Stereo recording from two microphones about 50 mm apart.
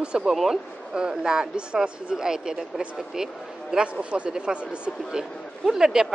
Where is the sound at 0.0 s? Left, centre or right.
Centre.